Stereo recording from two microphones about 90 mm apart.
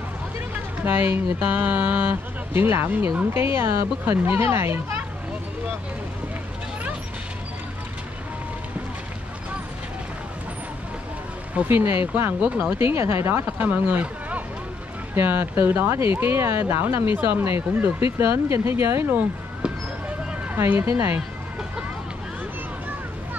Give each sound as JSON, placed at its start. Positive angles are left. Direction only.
{"t": 0.8, "sound": "speech", "side_deg": -20}
{"t": 11.5, "sound": "speech", "side_deg": -25}
{"t": 20.5, "sound": "speech", "side_deg": -25}